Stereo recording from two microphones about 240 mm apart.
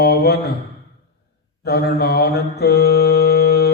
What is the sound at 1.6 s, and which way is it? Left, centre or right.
Mantra, left.